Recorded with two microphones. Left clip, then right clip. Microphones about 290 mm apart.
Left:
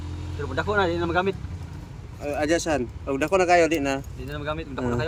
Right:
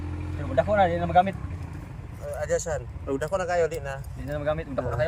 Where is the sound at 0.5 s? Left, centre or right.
Centre.